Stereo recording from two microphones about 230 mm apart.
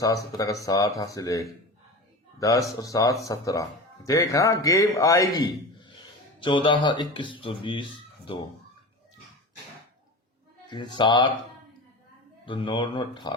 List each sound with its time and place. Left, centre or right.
0.0 s a man's voice: centre
10.7 s speech: centre
12.5 s speech: left